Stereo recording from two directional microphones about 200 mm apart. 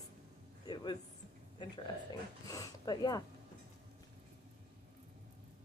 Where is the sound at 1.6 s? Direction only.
20° left (ahead or behind).